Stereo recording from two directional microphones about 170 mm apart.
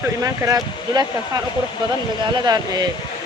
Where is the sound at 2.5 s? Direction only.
25° right (ahead or behind).